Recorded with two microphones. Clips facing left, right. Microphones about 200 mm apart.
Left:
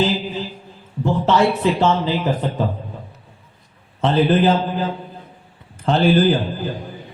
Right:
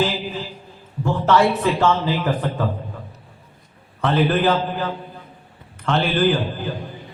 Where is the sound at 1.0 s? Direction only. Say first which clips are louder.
Left 1 dB; 20° left (ahead or behind).